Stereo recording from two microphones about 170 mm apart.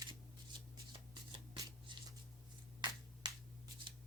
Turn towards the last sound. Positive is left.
turn(degrees=-25)  # may be behind; listen again after turning